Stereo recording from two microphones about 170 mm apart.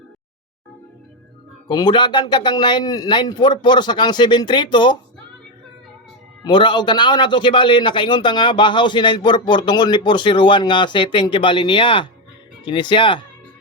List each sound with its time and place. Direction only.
1.6 s a man's voice: 25° left (ahead or behind)
6.4 s a man's voice: 25° left (ahead or behind)